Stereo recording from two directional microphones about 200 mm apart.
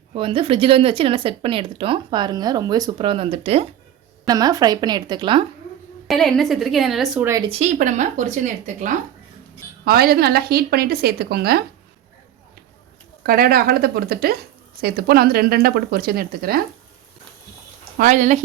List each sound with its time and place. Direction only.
0.1 s speech: 25° right (ahead or behind)
4.3 s speech: 20° right (ahead or behind)
6.1 s a woman's voice: centre (ahead or behind)
7.3 s speech: 15° right (ahead or behind)
7.5 s speech: 35° right (ahead or behind)
9.8 s speech: 50° right (ahead or behind)
13.2 s speech: 45° right (ahead or behind)
17.9 s speech: 40° right (ahead or behind)